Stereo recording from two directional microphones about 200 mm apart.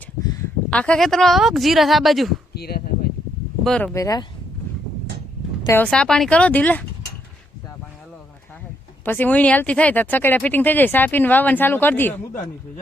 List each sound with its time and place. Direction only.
0.7 s a woman's voice: 5° left (ahead or behind)
2.6 s speech: 50° left (ahead or behind)
3.6 s a woman's voice: 5° left (ahead or behind)
3.9 s speech: 15° left (ahead or behind)
5.6 s speech: 10° left (ahead or behind)
9.0 s speech: 10° left (ahead or behind)